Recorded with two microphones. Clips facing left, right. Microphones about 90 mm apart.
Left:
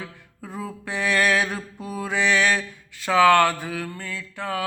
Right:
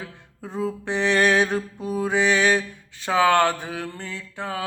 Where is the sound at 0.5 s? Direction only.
25° right (ahead or behind).